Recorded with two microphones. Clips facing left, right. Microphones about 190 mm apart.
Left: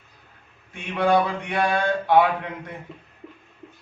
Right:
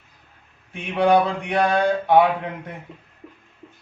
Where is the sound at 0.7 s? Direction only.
20° right (ahead or behind).